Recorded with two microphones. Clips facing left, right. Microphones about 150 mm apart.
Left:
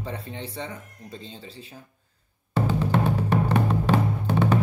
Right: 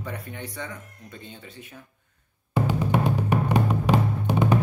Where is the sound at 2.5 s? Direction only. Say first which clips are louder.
Even; 15° right (ahead or behind).